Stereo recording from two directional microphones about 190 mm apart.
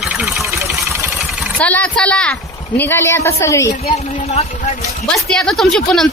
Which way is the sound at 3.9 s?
35° left (ahead or behind).